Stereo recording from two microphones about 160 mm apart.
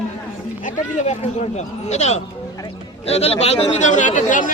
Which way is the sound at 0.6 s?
45° left (ahead or behind).